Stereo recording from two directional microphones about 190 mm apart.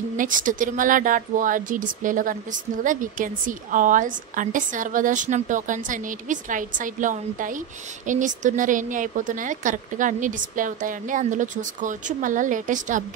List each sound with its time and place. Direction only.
0.2 s a woman's voice: 45° right (ahead or behind)